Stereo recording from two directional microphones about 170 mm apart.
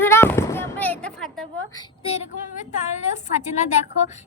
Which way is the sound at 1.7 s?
30° left (ahead or behind).